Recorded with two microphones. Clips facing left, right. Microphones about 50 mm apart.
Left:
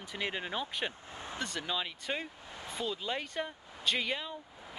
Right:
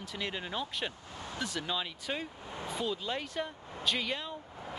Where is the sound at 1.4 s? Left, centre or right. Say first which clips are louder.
Right 1 dB; centre.